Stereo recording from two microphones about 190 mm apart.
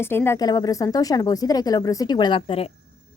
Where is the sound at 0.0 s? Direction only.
10° left (ahead or behind).